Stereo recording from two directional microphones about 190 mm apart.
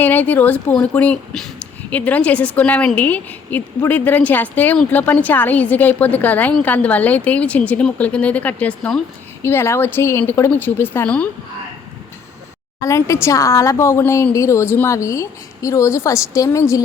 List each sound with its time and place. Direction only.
0.0 s a woman's voice: 10° left (ahead or behind)
12.8 s a woman's voice: 15° left (ahead or behind)